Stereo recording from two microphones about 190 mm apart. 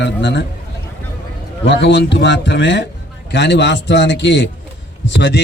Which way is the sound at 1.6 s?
65° left (ahead or behind).